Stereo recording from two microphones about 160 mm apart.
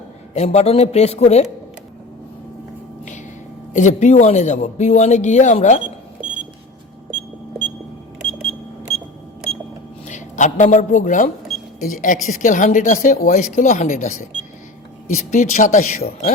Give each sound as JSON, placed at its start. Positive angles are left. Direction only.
{"t": 0.3, "sound": "a woman's voice", "side_deg": 40}
{"t": 3.7, "sound": "speech", "side_deg": 50}
{"t": 10.1, "sound": "speech", "side_deg": 50}